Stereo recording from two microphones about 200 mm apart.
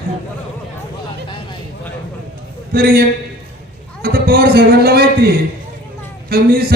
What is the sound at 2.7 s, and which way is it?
Speech, 50° right (ahead or behind).